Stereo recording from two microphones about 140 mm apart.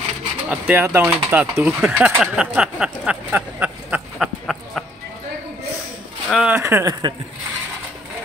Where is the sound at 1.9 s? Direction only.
10° right (ahead or behind).